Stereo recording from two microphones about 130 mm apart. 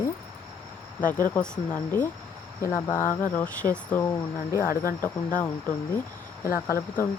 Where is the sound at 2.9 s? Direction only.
90° left.